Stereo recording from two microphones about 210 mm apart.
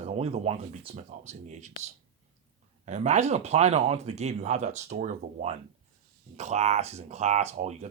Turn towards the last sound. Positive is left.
turn(degrees=-30)  # may be behind; listen again after turning